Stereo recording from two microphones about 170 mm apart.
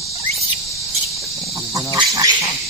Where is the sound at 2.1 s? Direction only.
20° right (ahead or behind).